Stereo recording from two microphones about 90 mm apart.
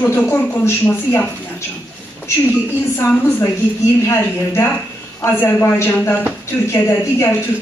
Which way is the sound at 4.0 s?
30° left (ahead or behind).